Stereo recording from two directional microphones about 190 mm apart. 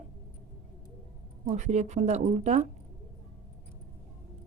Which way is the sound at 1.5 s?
35° right (ahead or behind).